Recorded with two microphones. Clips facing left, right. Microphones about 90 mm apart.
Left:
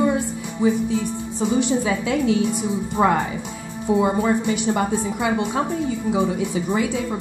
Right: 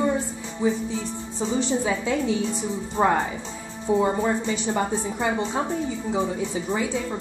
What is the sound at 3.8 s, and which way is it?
A woman's voice, 10° left (ahead or behind).